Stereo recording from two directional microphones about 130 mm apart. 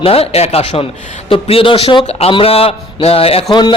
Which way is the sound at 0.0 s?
50° left (ahead or behind).